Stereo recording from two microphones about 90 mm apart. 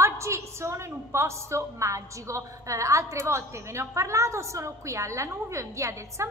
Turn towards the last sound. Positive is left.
turn(degrees=-35)  # may be behind; listen again after turning